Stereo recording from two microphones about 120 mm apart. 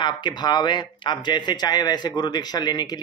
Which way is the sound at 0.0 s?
40° left (ahead or behind).